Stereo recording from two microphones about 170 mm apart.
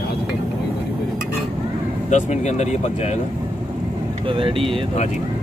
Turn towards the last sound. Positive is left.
turn(degrees=-30)  # may be behind; listen again after turning